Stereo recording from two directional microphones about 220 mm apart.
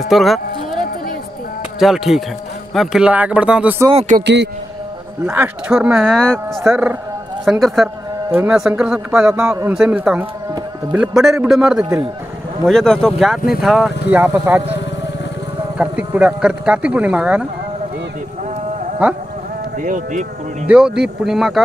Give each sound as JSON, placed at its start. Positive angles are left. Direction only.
{"t": 0.1, "sound": "speech", "side_deg": 0}
{"t": 1.8, "sound": "a man's voice", "side_deg": 0}
{"t": 5.2, "sound": "a man's voice", "side_deg": -10}
{"t": 15.8, "sound": "a man's voice", "side_deg": -5}
{"t": 19.0, "sound": "a man's voice", "side_deg": -5}
{"t": 19.8, "sound": "speech", "side_deg": -35}
{"t": 20.6, "sound": "a man's voice", "side_deg": -5}